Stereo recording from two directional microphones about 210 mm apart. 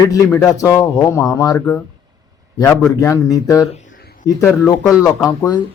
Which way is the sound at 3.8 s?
45° left (ahead or behind).